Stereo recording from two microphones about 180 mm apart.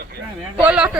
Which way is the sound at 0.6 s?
5° right (ahead or behind).